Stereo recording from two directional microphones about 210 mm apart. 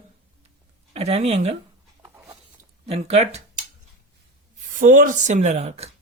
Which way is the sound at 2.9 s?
30° right (ahead or behind).